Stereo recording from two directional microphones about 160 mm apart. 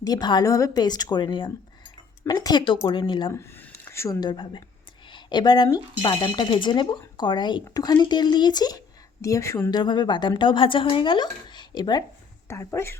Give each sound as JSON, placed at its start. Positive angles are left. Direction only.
{"t": 0.0, "sound": "speech", "side_deg": 25}
{"t": 3.3, "sound": "speech", "side_deg": 15}